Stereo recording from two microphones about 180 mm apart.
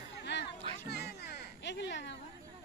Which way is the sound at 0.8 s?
65° left (ahead or behind).